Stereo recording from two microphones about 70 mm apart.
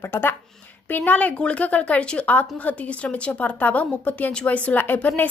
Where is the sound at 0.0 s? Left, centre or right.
Left.